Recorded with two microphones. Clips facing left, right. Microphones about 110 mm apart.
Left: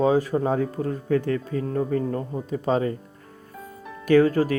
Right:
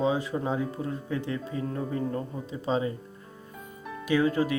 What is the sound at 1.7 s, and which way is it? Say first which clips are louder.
Speech: left 7 dB; 40° left (ahead or behind).